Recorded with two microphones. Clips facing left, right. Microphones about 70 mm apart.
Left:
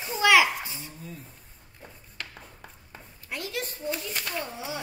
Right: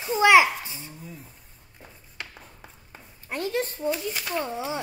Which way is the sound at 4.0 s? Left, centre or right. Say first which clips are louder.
Right 4 dB; centre.